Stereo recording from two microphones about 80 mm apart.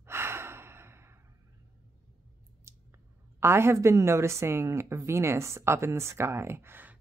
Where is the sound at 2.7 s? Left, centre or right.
Right.